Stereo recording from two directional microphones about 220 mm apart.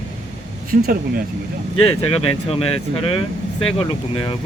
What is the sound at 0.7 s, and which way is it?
Speech, 45° right (ahead or behind).